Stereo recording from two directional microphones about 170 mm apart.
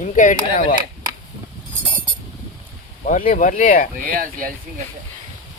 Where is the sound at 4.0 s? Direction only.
55° right (ahead or behind).